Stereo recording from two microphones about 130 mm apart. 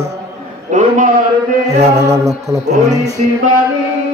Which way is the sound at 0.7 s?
75° right (ahead or behind).